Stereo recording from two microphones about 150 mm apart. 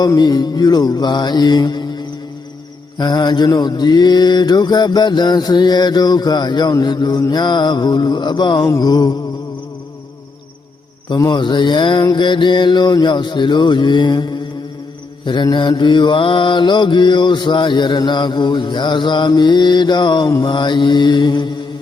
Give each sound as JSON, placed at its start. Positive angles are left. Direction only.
{"t": 0.0, "sound": "mantra", "side_deg": 25}
{"t": 11.1, "sound": "mantra", "side_deg": 30}